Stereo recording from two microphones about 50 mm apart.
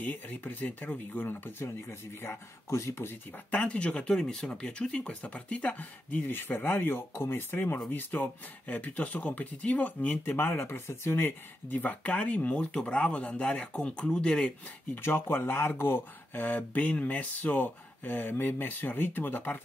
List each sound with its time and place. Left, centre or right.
0.0 s speech: left
3.5 s speech: left
6.2 s speech: left
7.9 s speech: left; by 14.5 s centre
15.0 s speech: left
16.3 s speech: left